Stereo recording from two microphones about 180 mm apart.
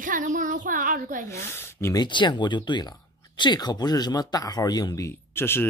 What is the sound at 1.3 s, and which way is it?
Speech, 20° left (ahead or behind).